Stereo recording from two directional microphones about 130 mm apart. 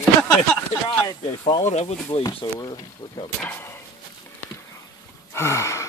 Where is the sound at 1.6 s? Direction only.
60° left (ahead or behind).